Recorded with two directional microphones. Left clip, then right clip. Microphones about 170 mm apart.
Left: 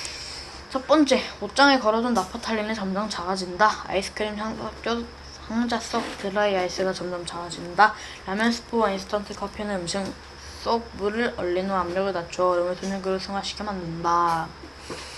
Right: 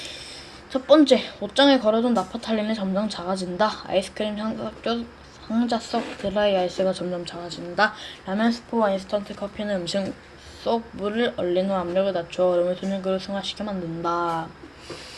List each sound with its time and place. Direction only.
0.7 s a woman's voice: 65° right (ahead or behind)
8.3 s a woman's voice: 55° right (ahead or behind); by 14.4 s 70° right (ahead or behind)